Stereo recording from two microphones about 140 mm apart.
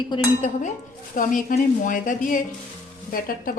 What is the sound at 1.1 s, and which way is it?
A woman's voice, 75° left (ahead or behind).